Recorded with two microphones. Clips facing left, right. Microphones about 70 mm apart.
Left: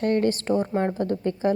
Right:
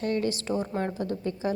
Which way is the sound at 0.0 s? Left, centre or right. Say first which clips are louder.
Left 6 dB; left.